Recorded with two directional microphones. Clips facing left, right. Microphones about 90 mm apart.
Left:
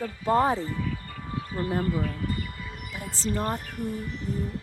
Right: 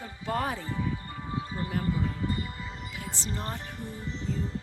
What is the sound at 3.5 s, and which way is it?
Speech, 25° right (ahead or behind).